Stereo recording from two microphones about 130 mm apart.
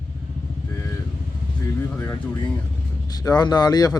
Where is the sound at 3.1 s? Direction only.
30° left (ahead or behind).